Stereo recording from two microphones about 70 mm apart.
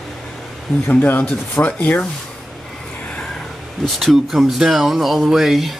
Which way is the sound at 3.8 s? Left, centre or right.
Centre.